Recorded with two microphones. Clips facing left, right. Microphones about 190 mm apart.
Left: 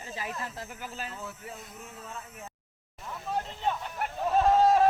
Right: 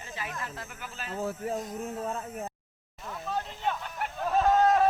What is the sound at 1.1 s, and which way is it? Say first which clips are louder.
Speech: right 9 dB; 50° right (ahead or behind).